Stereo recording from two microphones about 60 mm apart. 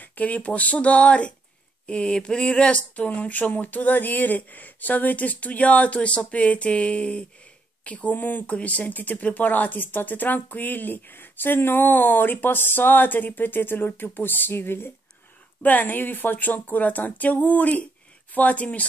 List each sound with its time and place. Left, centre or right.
0.0 s speech: left